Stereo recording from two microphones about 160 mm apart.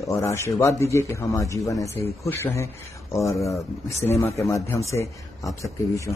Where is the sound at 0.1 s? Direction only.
20° left (ahead or behind).